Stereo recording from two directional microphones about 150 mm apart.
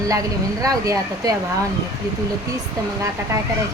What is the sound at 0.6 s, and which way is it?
Speech, 25° right (ahead or behind).